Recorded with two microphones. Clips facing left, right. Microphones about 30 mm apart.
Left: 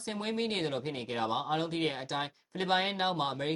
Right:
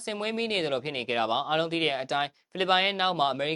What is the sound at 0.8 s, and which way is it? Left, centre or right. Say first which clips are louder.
Speech: right 5 dB; right.